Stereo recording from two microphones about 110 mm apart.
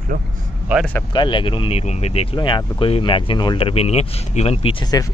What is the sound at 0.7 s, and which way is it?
Speech, 10° right (ahead or behind).